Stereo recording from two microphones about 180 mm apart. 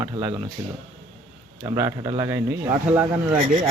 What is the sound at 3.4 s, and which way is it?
Speech, 50° right (ahead or behind).